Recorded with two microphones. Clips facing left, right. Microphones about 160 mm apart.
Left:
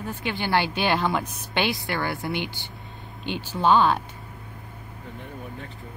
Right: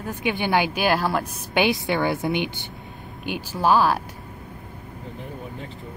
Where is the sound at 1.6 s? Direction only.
20° right (ahead or behind).